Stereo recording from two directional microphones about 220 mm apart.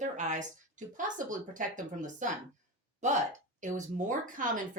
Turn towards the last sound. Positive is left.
turn(degrees=-35)  # may be behind; listen again after turning